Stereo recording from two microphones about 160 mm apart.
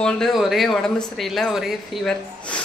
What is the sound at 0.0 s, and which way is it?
Speech, centre (ahead or behind).